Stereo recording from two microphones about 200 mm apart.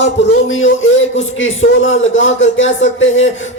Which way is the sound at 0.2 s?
65° left (ahead or behind).